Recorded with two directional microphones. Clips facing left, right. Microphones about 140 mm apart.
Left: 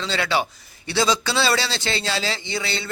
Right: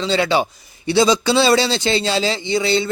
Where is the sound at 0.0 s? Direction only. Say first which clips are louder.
Right 6 dB; 20° right (ahead or behind).